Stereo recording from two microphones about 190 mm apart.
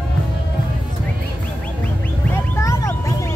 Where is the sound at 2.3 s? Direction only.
15° left (ahead or behind).